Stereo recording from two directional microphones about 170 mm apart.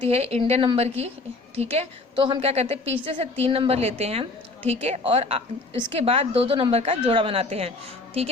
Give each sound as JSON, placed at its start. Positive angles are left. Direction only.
{"t": 0.0, "sound": "a woman's voice", "side_deg": -35}